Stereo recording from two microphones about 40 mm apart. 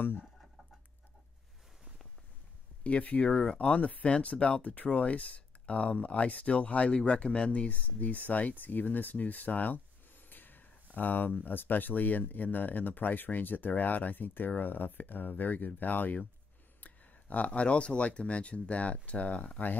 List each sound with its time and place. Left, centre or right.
2.8 s speech: left
3.3 s speech: left
3.6 s speech: left
16.8 s a sound: left
17.5 s speech: left